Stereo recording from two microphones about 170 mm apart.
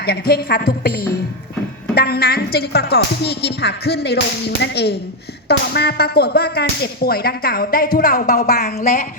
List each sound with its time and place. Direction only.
0.0 s a woman's voice: 65° left (ahead or behind)
8.6 s speech: 45° left (ahead or behind)